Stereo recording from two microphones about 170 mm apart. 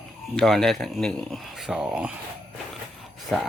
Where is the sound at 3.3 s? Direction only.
5° left (ahead or behind).